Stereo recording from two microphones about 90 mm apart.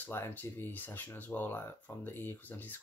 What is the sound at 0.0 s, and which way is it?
Speech, 25° left (ahead or behind).